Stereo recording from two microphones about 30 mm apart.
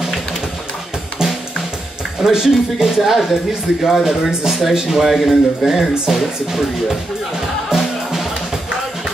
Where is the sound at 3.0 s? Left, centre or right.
Centre.